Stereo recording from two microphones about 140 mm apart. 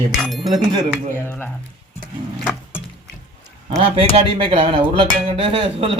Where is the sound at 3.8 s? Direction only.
40° right (ahead or behind).